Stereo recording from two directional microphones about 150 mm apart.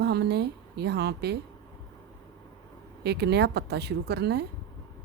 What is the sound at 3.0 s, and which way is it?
Speech, 90° right.